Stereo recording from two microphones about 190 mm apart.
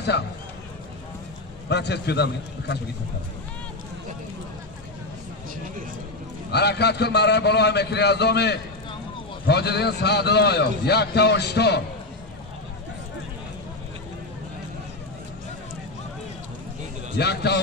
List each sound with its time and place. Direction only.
0.1 s speech: 65° left (ahead or behind)
1.7 s a man's voice: 60° left (ahead or behind)
6.5 s a man's voice: 60° left (ahead or behind)
17.2 s a man's voice: 60° left (ahead or behind)